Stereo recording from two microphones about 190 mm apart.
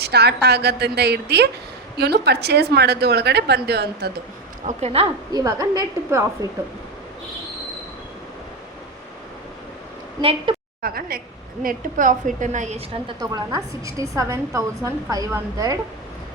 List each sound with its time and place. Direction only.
0.0 s speech: 60° right (ahead or behind)
4.6 s a woman's voice: 35° right (ahead or behind)
5.3 s a woman's voice: 15° right (ahead or behind)
10.2 s a woman's voice: 30° right (ahead or behind)
10.8 s a woman's voice: 50° right (ahead or behind); by 13.0 s 35° right (ahead or behind)
13.1 s a woman's voice: 20° right (ahead or behind)